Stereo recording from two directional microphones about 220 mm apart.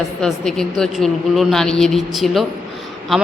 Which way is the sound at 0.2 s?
5° left (ahead or behind).